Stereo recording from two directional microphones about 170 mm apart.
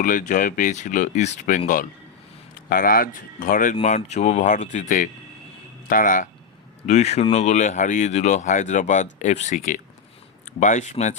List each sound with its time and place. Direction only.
0.0 s speech: 50° left (ahead or behind)
6.8 s speech: 40° left (ahead or behind)